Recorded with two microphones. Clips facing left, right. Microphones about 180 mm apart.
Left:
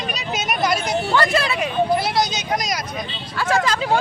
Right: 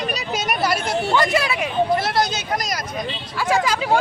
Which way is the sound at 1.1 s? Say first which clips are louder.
Even; 15° right (ahead or behind).